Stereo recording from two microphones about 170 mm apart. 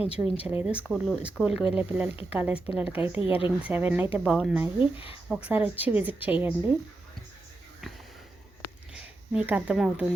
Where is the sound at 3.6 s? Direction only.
10° right (ahead or behind).